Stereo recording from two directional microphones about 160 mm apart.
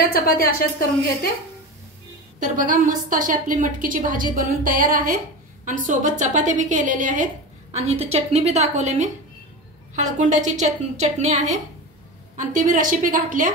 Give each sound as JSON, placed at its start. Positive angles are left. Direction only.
{"t": 0.0, "sound": "a woman's voice", "side_deg": 70}
{"t": 2.4, "sound": "a woman's voice", "side_deg": -55}
{"t": 7.7, "sound": "a woman's voice", "side_deg": -40}